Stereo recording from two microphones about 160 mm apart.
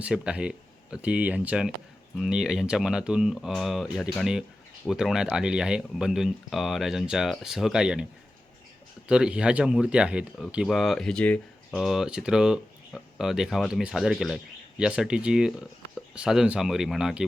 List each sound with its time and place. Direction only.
0.0 s speech: 5° right (ahead or behind)
9.0 s speech: 5° right (ahead or behind)